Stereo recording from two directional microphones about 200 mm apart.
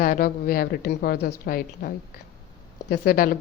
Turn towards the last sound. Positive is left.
turn(degrees=50)  # may be behind; listen again after turning